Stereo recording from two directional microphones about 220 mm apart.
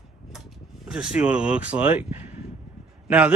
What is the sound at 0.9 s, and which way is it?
A man's voice, 5° right (ahead or behind).